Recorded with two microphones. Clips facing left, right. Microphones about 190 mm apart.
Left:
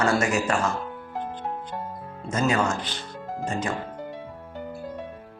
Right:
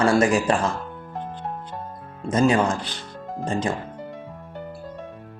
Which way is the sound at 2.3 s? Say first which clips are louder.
Right 5 dB; 30° right (ahead or behind).